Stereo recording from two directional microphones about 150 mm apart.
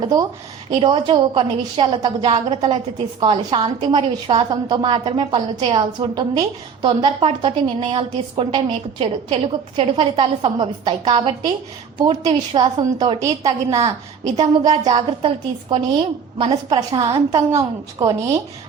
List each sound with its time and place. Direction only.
0.0 s a woman's voice: 25° right (ahead or behind)